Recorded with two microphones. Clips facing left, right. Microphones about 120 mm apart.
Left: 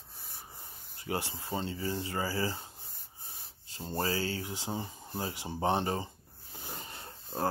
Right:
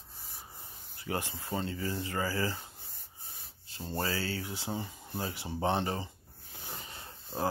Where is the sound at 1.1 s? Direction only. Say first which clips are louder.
Even; 25° left (ahead or behind).